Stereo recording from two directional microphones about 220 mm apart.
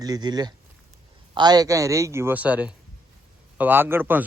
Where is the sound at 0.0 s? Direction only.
20° right (ahead or behind).